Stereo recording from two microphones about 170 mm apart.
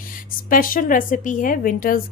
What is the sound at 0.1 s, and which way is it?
A woman's voice, 55° left (ahead or behind).